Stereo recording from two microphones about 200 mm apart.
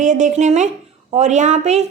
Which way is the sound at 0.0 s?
35° right (ahead or behind).